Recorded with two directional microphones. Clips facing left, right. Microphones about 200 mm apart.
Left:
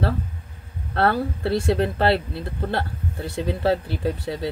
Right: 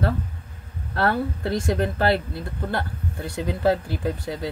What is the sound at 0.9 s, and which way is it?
Speech, 30° left (ahead or behind).